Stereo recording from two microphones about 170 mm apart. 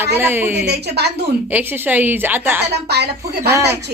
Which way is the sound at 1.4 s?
10° right (ahead or behind).